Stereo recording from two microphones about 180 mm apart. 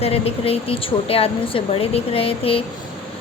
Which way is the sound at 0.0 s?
35° left (ahead or behind).